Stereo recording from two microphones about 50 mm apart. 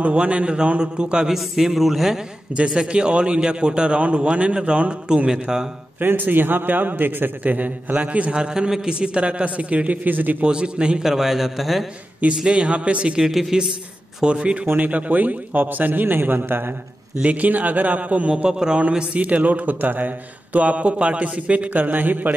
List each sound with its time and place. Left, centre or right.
0.0 s a man's voice: right
1.3 s a man's voice: centre
5.9 s a man's voice: right
8.4 s a man's voice: centre; by 10.3 s right
10.4 s a man's voice: centre
11.1 s a man's voice: centre
12.4 s a man's voice: right
13.3 s a man's voice: centre
14.2 s a man's voice: right
17.2 s a man's voice: right